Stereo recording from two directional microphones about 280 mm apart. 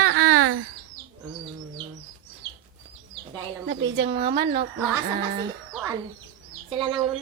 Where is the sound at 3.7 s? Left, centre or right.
Right.